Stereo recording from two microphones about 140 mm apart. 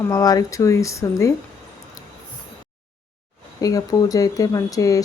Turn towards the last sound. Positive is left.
turn(degrees=25)  # may be behind; listen again after turning